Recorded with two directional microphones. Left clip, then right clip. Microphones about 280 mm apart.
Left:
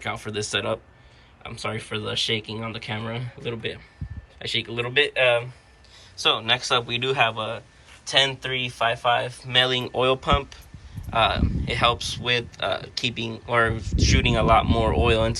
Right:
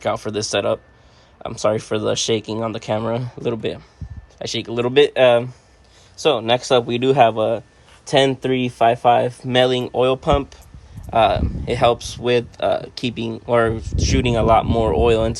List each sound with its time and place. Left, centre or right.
0.0 s speech: centre
8.8 s speech: right